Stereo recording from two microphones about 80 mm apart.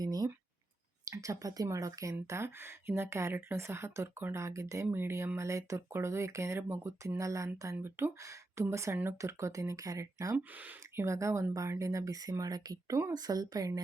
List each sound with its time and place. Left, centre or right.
0.0 s a sound: right
1.1 s speech: right
7.8 s speech: right
10.3 s speech: right
11.0 s speech: right